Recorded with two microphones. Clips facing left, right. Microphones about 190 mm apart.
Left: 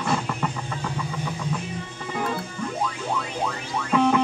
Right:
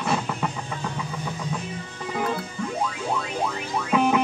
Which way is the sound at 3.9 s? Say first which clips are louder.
Left 1 dB; 5° right (ahead or behind).